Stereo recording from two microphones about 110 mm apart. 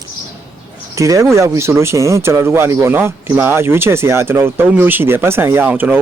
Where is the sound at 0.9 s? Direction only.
30° right (ahead or behind).